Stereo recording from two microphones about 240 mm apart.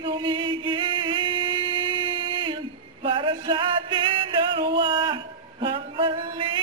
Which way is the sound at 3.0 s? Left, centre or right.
Right.